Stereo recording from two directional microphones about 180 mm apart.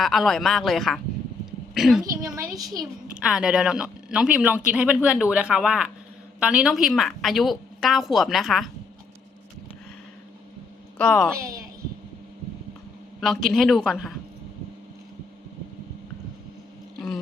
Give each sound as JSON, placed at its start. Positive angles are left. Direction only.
{"t": 0.0, "sound": "a woman's voice", "side_deg": 0}
{"t": 2.2, "sound": "a woman's voice", "side_deg": -15}
{"t": 2.6, "sound": "a woman's voice", "side_deg": 0}
{"t": 10.9, "sound": "a woman's voice", "side_deg": 5}
{"t": 11.3, "sound": "a woman's voice", "side_deg": -15}
{"t": 13.1, "sound": "a woman's voice", "side_deg": 0}